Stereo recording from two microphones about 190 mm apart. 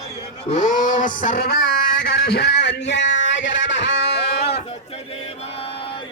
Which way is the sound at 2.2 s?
60° left (ahead or behind).